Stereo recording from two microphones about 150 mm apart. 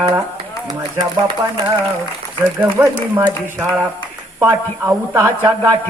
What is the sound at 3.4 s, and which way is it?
Speech, 15° right (ahead or behind).